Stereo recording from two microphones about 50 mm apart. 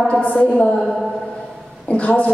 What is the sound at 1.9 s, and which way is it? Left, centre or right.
Speech, left.